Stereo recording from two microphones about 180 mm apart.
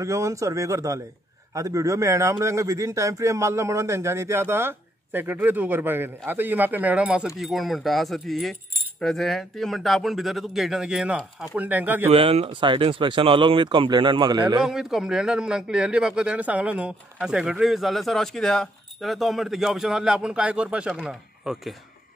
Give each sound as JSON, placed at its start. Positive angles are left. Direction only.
{"t": 0.0, "sound": "a man's voice", "side_deg": -15}
{"t": 12.1, "sound": "speech", "side_deg": -30}
{"t": 14.6, "sound": "speech", "side_deg": -5}